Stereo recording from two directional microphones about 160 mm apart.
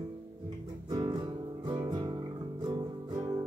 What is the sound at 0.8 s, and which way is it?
Music, 25° right (ahead or behind).